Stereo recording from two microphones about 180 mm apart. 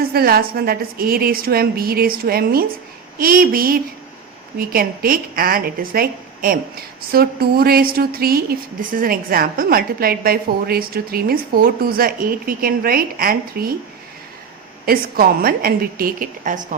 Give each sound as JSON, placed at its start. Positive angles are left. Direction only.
{"t": 0.1, "sound": "a woman's voice", "side_deg": -55}
{"t": 14.8, "sound": "a woman's voice", "side_deg": -55}